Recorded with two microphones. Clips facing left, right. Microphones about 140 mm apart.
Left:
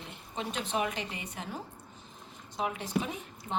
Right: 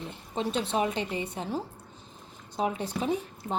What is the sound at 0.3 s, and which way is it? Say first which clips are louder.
A woman's voice: right 5 dB; 30° right (ahead or behind).